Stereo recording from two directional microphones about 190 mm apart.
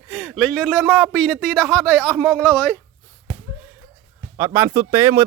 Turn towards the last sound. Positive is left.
turn(degrees=-15)  # may be behind; listen again after turning